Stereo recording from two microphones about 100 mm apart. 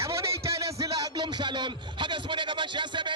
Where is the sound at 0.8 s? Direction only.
35° right (ahead or behind).